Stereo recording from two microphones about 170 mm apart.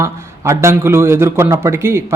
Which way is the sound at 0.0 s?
15° right (ahead or behind).